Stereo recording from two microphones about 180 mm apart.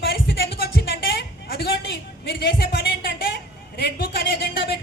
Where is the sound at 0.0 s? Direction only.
65° left (ahead or behind).